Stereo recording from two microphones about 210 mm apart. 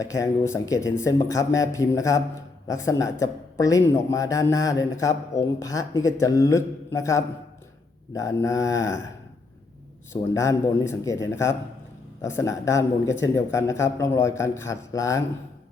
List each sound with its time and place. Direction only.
0.0 s a man's voice: 15° left (ahead or behind)
10.1 s a man's voice: 15° left (ahead or behind)